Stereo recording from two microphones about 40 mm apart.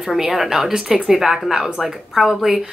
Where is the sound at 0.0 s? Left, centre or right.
Centre.